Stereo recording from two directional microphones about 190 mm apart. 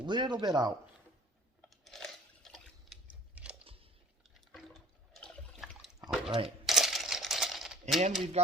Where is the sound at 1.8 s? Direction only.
Centre (ahead or behind).